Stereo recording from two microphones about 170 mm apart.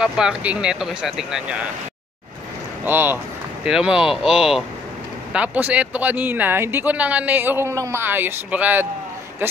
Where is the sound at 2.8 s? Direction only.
10° right (ahead or behind).